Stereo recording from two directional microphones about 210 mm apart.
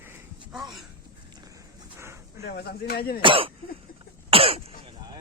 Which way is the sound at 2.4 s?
50° left (ahead or behind).